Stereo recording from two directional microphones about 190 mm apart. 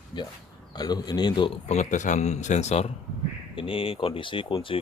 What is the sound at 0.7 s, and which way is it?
A man's voice, 20° left (ahead or behind).